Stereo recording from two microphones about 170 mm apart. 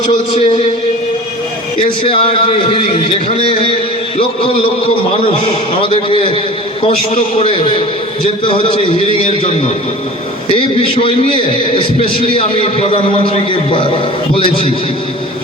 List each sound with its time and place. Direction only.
0.1 s a man's voice: 25° left (ahead or behind)
1.8 s a man's voice: 30° left (ahead or behind)
5.7 s a man's voice: 30° left (ahead or behind)
7.4 s a man's voice: 30° left (ahead or behind)
10.5 s a man's voice: 30° left (ahead or behind)